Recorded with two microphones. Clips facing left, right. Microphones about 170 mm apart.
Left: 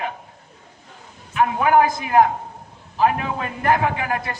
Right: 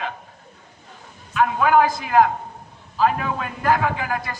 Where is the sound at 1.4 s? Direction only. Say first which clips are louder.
Left 1 dB; 20° left (ahead or behind).